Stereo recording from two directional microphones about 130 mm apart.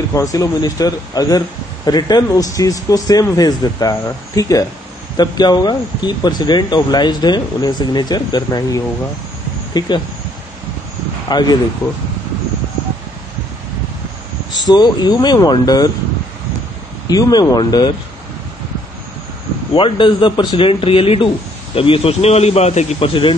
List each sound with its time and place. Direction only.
0.1 s speech: 25° left (ahead or behind)
11.2 s speech: 30° left (ahead or behind)
14.7 s speech: 35° left (ahead or behind)
17.1 s speech: 30° left (ahead or behind)
19.7 s speech: 40° left (ahead or behind)